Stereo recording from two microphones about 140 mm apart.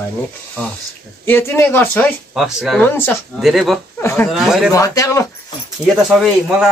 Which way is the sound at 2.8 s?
15° left (ahead or behind).